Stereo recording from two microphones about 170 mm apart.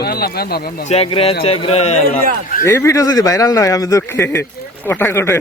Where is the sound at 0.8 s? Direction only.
35° left (ahead or behind).